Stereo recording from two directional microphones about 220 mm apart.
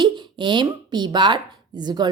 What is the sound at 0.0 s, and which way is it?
A woman's voice, 20° right (ahead or behind).